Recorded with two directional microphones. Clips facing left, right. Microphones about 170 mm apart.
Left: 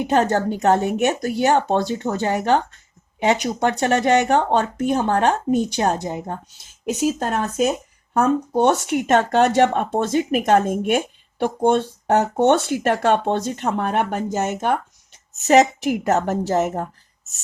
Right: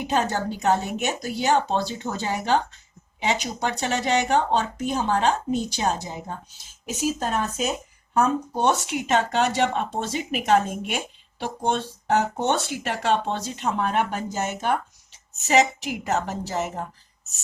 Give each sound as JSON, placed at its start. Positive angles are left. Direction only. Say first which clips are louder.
{"t": 0.1, "sound": "speech", "louder": "left 5 dB", "side_deg": 55}